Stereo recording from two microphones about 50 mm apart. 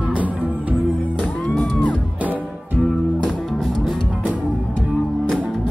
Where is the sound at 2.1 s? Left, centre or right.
Right.